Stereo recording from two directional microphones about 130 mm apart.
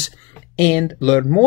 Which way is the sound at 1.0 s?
30° left (ahead or behind).